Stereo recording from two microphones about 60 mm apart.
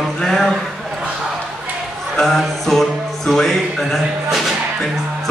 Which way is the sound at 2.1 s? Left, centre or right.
Centre.